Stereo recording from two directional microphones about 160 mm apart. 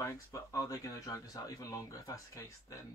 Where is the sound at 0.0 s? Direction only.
20° left (ahead or behind).